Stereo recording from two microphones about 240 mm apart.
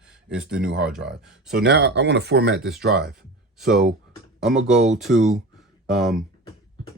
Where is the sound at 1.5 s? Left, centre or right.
Right.